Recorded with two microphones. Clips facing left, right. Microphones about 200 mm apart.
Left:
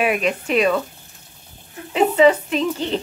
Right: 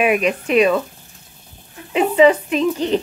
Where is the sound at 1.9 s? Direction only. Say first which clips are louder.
Right 1 dB; 10° right (ahead or behind).